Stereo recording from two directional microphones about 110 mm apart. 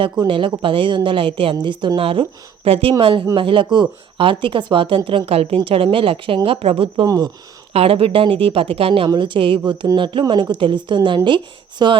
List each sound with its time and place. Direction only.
0.3 s speech: 50° right (ahead or behind)
2.0 s speech: 55° right (ahead or behind)
9.0 s speech: 45° right (ahead or behind)